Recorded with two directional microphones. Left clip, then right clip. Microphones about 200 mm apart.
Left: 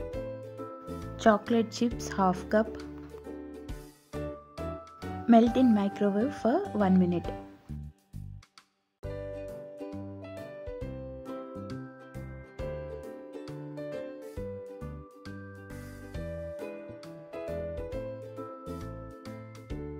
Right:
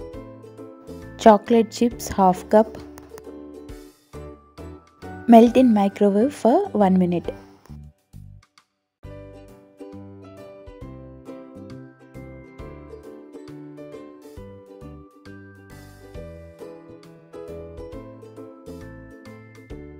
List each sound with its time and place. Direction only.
0.0 s music: centre (ahead or behind)
1.1 s a woman's voice: 25° right (ahead or behind)
3.6 s music: centre (ahead or behind)
5.3 s a woman's voice: 25° right (ahead or behind)
9.3 s music: 5° right (ahead or behind)
13.4 s music: centre (ahead or behind)
17.6 s music: centre (ahead or behind)